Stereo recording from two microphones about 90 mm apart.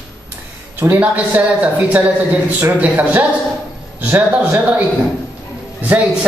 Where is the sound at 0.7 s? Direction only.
20° right (ahead or behind).